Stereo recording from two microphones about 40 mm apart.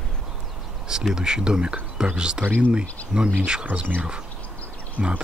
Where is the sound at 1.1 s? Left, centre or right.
Centre.